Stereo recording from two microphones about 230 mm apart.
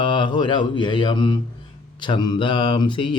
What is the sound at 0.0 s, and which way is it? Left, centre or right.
Mantra, left.